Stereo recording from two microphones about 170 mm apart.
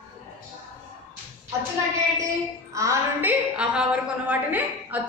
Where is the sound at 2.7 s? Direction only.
20° right (ahead or behind).